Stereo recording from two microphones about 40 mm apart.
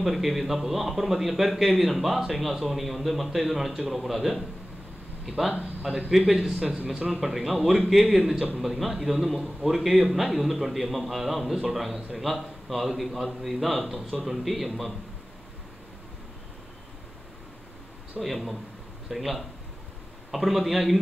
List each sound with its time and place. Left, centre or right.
0.0 s speech: centre
6.1 s speech: centre
18.2 s speech: centre